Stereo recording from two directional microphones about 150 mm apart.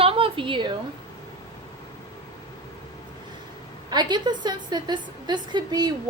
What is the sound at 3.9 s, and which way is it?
Speech, 30° right (ahead or behind).